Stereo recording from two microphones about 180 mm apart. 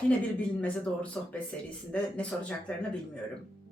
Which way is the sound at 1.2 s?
5° left (ahead or behind).